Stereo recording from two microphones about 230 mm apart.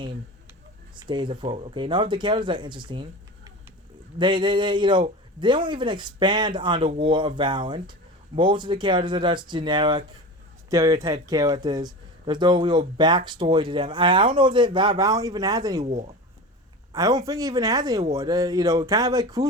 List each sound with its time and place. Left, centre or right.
0.9 s speech: centre
15.8 s speech: right
16.9 s speech: centre